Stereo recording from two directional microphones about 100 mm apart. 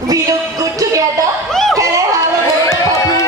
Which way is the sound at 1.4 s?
5° left (ahead or behind).